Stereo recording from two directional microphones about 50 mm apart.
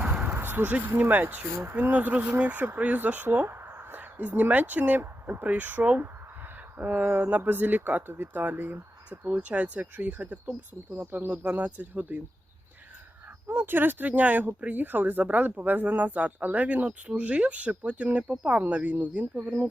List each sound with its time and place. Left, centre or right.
0.0 s a sound: right
0.3 s speech: right
3.4 s speech: right
9.0 s speech: right
10.9 s speech: right
11.5 s speech: right
13.5 s speech: right